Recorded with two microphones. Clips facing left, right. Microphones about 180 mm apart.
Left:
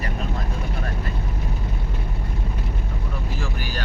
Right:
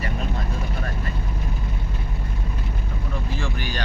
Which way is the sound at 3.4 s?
5° left (ahead or behind).